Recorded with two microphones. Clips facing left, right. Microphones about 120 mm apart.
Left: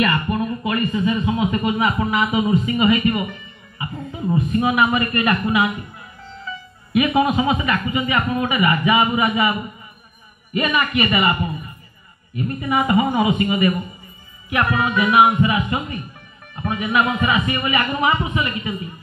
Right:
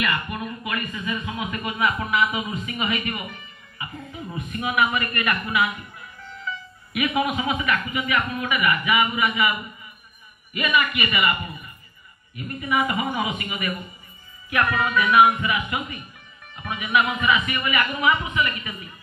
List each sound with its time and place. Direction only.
0.0 s speech: 35° left (ahead or behind)
12.6 s speech: 30° left (ahead or behind)